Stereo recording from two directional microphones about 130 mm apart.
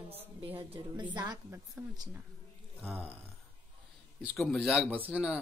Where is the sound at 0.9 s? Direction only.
35° right (ahead or behind).